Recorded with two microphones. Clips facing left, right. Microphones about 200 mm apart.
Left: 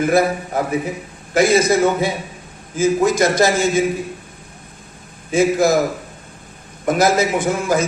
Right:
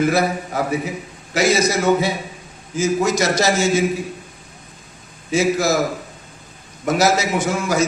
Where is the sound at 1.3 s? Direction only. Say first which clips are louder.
Left 3 dB; 55° left (ahead or behind).